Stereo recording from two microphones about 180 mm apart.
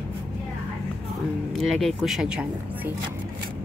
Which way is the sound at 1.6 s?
Centre (ahead or behind).